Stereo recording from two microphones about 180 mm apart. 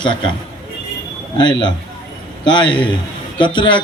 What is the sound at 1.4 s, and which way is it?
A man's voice, 25° left (ahead or behind).